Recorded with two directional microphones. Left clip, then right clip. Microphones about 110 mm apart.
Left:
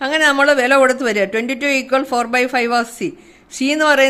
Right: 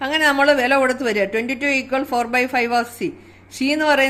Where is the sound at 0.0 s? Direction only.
30° left (ahead or behind).